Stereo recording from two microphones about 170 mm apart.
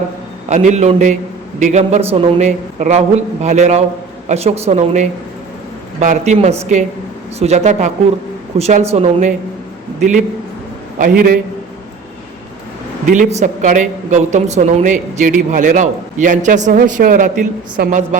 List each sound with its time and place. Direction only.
0.5 s a woman's voice: 45° right (ahead or behind)
10.9 s a man's voice: 55° right (ahead or behind)
13.1 s a woman's voice: 45° right (ahead or behind)